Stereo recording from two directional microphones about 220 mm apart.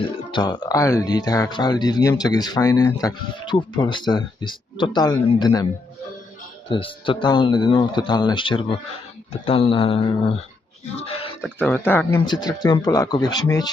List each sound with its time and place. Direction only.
0.3 s speech: 20° left (ahead or behind)
6.7 s speech: 25° left (ahead or behind)
11.4 s speech: 10° left (ahead or behind)
12.2 s speech: 20° left (ahead or behind)